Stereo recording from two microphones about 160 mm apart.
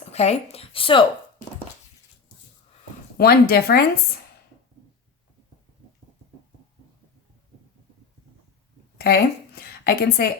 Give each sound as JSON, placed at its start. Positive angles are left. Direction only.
{"t": 0.0, "sound": "speech", "side_deg": 40}
{"t": 3.2, "sound": "speech", "side_deg": 75}
{"t": 9.0, "sound": "a sound", "side_deg": 80}